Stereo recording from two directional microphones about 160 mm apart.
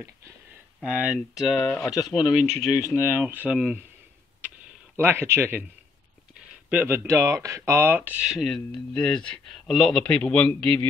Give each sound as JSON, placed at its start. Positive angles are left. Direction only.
{"t": 0.7, "sound": "speech", "side_deg": -5}
{"t": 1.9, "sound": "speech", "side_deg": 25}
{"t": 3.3, "sound": "speech", "side_deg": -10}
{"t": 4.9, "sound": "speech", "side_deg": -15}
{"t": 6.7, "sound": "speech", "side_deg": -10}